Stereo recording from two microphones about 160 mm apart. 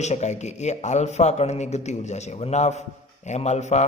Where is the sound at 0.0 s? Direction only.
45° left (ahead or behind).